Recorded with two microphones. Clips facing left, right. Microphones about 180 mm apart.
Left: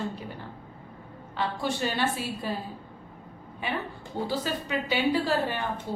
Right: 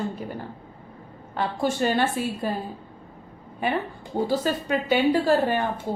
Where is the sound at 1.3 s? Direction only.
50° right (ahead or behind).